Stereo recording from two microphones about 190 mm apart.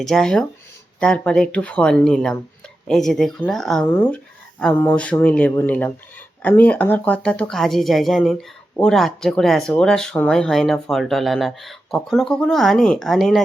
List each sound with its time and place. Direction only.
0.0 s speech: centre (ahead or behind)